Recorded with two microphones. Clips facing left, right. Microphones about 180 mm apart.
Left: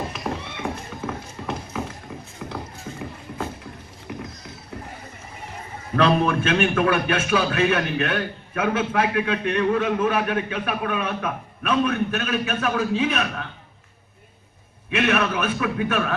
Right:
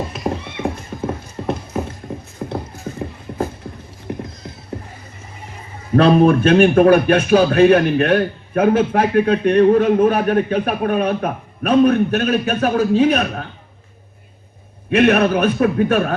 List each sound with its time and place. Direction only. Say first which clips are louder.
0.6 s clip-clop: right 8 dB; 35° right (ahead or behind)
3.6 s a sound: right 6 dB; 50° right (ahead or behind)
4.1 s clip-clop: right 7 dB; 40° right (ahead or behind)
6.0 s speech: right 8 dB; 40° right (ahead or behind)
14.8 s speech: right 8 dB; 40° right (ahead or behind)